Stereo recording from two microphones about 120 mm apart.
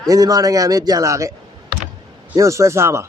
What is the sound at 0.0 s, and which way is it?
A man's voice, 30° right (ahead or behind).